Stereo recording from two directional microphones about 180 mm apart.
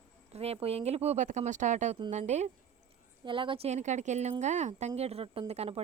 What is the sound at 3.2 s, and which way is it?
Speech, 30° right (ahead or behind).